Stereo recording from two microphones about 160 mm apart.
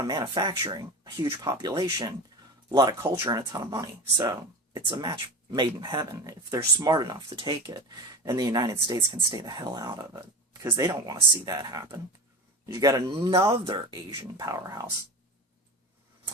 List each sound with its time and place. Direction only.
0.0 s speech: 25° right (ahead or behind)